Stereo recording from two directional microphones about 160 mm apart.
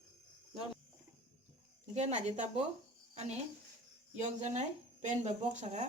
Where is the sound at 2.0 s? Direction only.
45° right (ahead or behind).